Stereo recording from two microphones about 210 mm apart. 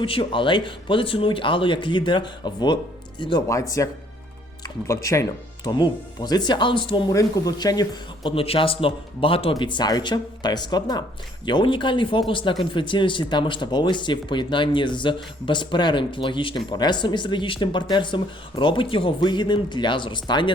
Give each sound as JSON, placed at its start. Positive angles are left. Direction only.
{"t": 0.0, "sound": "speech", "side_deg": 25}
{"t": 5.0, "sound": "speech", "side_deg": 15}